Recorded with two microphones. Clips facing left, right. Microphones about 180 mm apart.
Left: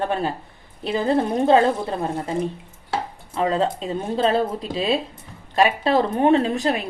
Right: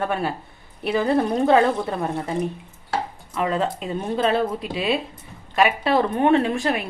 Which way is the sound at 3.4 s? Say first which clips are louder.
Left 2 dB; 30° left (ahead or behind).